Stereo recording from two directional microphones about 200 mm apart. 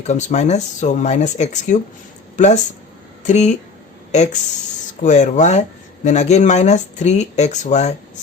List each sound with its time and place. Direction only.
0.1 s speech: 35° left (ahead or behind)